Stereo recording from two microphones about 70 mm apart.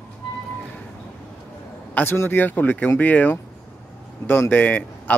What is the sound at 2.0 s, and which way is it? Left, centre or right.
Speech, left.